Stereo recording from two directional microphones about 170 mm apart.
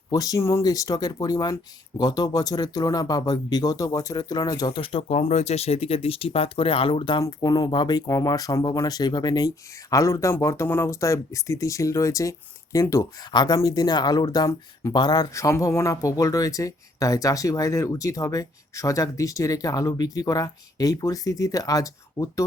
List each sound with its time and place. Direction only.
0.1 s speech: 20° left (ahead or behind)